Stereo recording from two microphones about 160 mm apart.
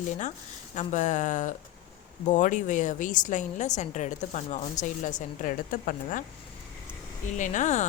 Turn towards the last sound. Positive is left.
turn(degrees=50)  # may be behind; listen again after turning